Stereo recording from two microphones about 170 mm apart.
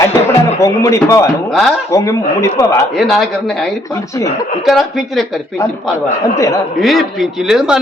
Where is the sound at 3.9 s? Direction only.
20° left (ahead or behind).